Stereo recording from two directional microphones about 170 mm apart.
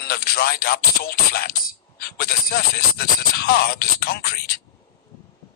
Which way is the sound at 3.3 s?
65° left (ahead or behind).